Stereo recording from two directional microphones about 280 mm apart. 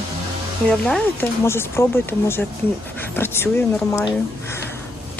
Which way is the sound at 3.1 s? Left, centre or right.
Centre.